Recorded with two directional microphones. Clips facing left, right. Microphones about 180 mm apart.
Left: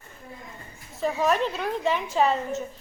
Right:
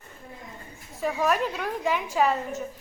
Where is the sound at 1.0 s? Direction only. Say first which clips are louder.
Left 1 dB; 25° left (ahead or behind).